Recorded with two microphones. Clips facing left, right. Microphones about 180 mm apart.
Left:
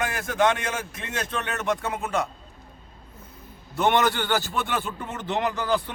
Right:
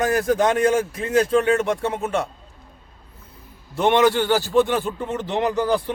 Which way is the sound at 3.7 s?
30° right (ahead or behind).